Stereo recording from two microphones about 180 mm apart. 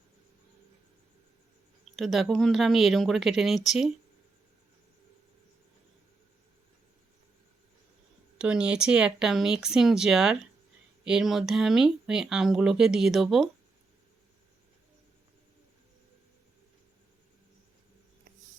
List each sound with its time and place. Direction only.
2.0 s speech: centre (ahead or behind)
8.4 s speech: 5° right (ahead or behind)